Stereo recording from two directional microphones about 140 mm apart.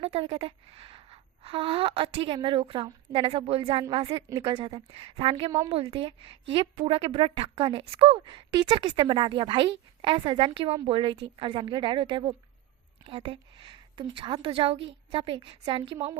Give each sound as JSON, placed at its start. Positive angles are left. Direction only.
{"t": 0.0, "sound": "a woman's voice", "side_deg": -45}